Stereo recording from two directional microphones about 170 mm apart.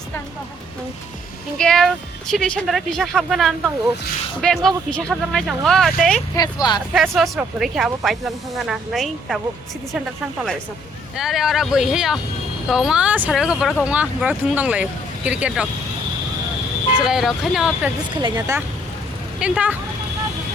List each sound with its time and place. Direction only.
1.5 s speech: 5° left (ahead or behind)
6.3 s speech: 25° left (ahead or behind)
7.2 s speech: centre (ahead or behind)
11.2 s speech: centre (ahead or behind)
17.0 s speech: centre (ahead or behind)
18.2 s speech: 20° right (ahead or behind)
19.4 s speech: 5° right (ahead or behind)